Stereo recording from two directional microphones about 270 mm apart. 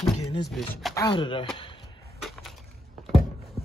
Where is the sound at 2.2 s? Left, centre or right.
Centre.